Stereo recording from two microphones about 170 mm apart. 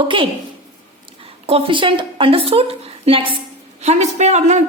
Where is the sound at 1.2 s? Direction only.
35° right (ahead or behind).